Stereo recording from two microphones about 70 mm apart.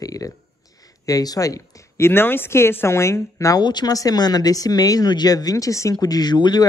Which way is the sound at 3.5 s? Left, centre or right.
Left.